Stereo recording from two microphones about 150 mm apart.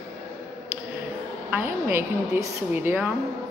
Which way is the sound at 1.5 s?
15° right (ahead or behind).